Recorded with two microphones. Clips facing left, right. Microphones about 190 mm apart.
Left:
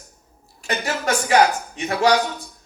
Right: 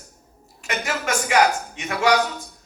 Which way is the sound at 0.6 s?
35° left (ahead or behind).